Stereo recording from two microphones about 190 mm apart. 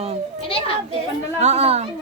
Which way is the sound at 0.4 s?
30° left (ahead or behind).